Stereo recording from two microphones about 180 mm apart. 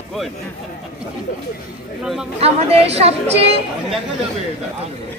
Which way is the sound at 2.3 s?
35° right (ahead or behind).